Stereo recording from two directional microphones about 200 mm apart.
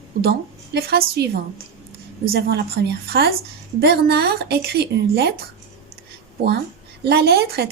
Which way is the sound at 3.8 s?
55° right (ahead or behind).